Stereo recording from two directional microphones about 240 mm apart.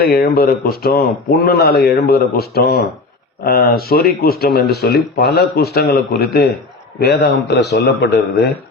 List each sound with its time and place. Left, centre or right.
0.0 s a man's voice: left